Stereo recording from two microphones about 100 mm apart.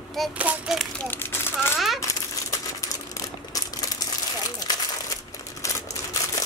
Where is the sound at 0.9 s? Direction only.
20° left (ahead or behind).